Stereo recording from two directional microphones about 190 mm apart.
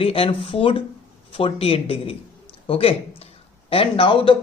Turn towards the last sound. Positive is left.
turn(degrees=25)  # may be behind; listen again after turning